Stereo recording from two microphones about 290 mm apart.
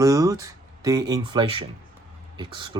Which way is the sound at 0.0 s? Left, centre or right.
Centre.